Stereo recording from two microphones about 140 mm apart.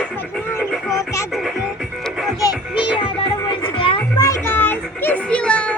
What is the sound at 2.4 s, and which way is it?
Music, 30° left (ahead or behind).